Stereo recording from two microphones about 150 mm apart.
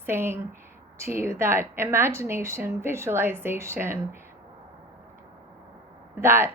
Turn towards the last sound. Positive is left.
turn(degrees=-15)  # may be behind; listen again after turning